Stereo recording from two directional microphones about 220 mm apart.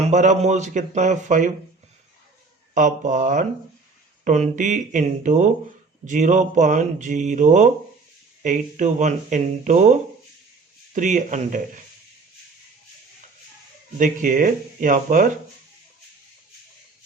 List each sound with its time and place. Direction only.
0.0 s speech: 30° right (ahead or behind)
2.7 s speech: 35° right (ahead or behind)
14.0 s speech: 35° right (ahead or behind)